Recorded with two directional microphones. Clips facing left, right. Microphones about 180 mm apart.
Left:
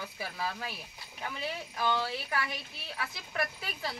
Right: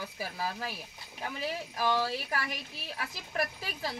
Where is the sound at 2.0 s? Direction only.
40° right (ahead or behind).